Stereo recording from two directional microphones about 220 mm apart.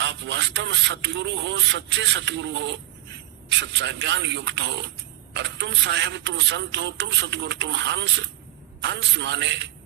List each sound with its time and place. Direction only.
0.0 s speech: 55° right (ahead or behind)